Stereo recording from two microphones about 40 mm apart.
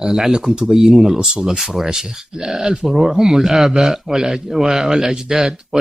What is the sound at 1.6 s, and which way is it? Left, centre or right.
A man's voice, centre.